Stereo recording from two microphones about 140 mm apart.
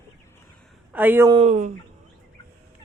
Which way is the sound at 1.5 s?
60° right (ahead or behind).